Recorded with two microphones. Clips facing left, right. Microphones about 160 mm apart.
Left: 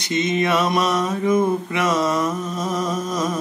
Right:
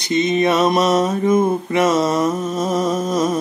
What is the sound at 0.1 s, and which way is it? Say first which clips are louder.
Mantra: right 4 dB; 30° right (ahead or behind).